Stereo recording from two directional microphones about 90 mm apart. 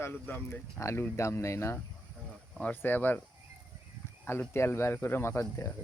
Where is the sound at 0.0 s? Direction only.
25° left (ahead or behind).